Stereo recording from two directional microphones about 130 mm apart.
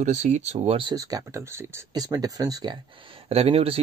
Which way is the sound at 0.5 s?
45° right (ahead or behind).